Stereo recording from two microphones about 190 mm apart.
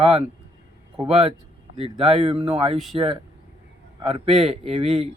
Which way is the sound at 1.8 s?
30° right (ahead or behind).